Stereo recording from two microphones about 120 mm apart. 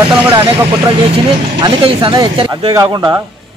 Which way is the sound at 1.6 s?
45° right (ahead or behind).